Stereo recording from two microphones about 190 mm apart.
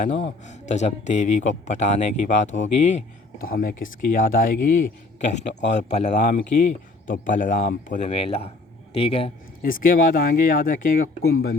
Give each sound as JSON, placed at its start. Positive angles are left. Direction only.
{"t": 0.0, "sound": "speech", "side_deg": 40}
{"t": 3.4, "sound": "speech", "side_deg": 50}
{"t": 9.6, "sound": "speech", "side_deg": 45}